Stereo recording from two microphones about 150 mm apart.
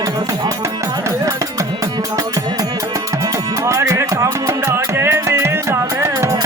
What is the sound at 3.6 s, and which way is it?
Music, 20° right (ahead or behind).